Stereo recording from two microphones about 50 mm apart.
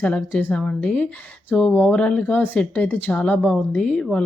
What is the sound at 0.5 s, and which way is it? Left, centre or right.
Speech, left.